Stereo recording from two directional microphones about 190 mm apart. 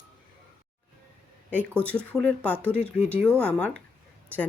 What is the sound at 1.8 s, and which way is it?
Speech, 5° left (ahead or behind).